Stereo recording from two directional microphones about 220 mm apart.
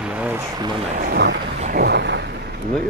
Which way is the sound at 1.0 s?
50° right (ahead or behind).